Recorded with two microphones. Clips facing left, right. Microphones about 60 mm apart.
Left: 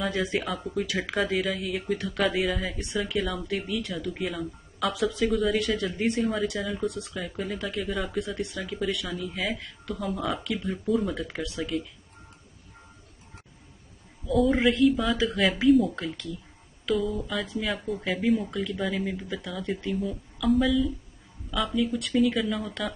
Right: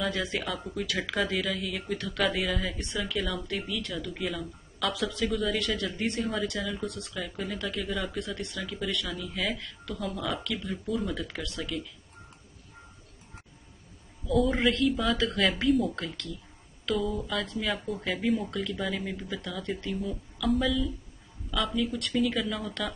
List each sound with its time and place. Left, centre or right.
0.1 s speech: centre
0.4 s speech: centre
6.9 s speech: left
7.3 s speech: centre
8.2 s speech: centre
8.8 s speech: centre
11.0 s speech: centre
11.4 s speech: centre
14.3 s speech: centre